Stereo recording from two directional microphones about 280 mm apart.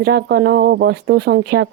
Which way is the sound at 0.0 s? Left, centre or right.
Right.